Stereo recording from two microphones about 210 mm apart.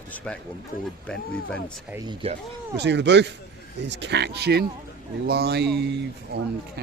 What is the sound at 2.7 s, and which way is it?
Speech, 55° right (ahead or behind).